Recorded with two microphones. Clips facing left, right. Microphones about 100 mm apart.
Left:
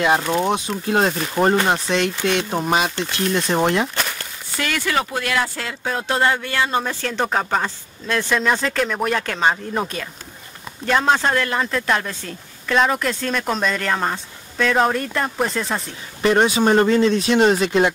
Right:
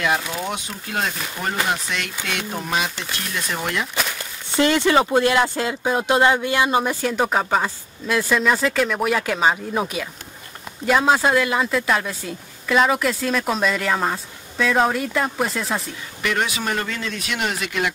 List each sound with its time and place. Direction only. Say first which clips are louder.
0.3 s speech: left 8 dB; 30° left (ahead or behind)
3.9 s a sound: even; 5° right (ahead or behind)
4.5 s speech: right 7 dB; 25° right (ahead or behind); by 15.9 s centre (ahead or behind)
16.2 s speech: left 8 dB; 30° left (ahead or behind)